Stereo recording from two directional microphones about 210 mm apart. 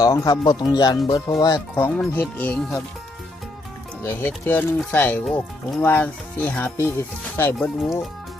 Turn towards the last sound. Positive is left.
turn(degrees=0)  # may be behind; listen again after turning